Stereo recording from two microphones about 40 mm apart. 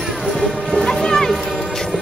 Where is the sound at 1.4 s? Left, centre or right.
Centre.